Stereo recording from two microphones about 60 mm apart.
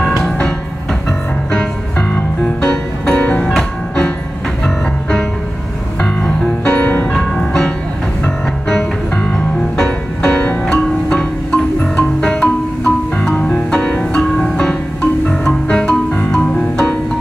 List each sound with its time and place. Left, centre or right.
0.0 s music: centre
2.6 s music: centre
6.6 s music: centre